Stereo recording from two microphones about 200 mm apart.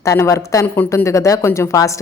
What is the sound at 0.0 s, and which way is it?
A woman's voice, 15° left (ahead or behind).